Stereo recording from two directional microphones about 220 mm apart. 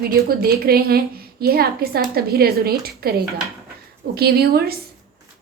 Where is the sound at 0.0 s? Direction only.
45° right (ahead or behind).